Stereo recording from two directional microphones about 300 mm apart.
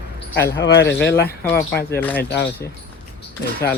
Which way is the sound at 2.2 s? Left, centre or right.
Left.